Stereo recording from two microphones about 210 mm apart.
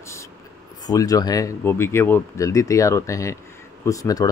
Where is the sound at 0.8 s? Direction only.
15° left (ahead or behind).